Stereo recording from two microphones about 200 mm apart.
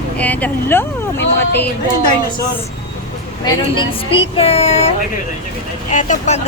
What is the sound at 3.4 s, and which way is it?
Speech, 25° left (ahead or behind).